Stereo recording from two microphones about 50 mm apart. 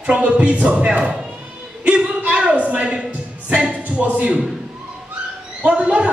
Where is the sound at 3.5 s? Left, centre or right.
Right.